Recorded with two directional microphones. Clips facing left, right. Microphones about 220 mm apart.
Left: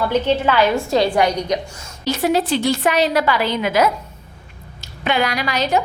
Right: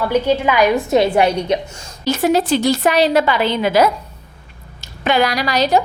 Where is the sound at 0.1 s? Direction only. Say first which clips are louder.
Right 2 dB; 10° right (ahead or behind); by 1.9 s 25° right (ahead or behind).